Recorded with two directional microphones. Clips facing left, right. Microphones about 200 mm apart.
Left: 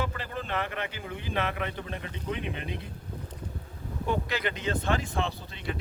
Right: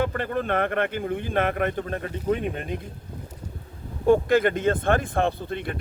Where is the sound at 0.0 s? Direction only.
55° right (ahead or behind).